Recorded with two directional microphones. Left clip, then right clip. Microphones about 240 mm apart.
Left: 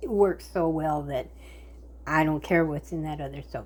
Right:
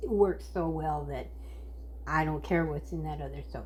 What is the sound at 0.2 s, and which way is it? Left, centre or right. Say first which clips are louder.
A woman's voice: left 5 dB; left.